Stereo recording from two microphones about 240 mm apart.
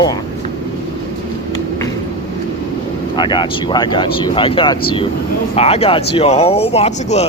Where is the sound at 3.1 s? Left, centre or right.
Centre.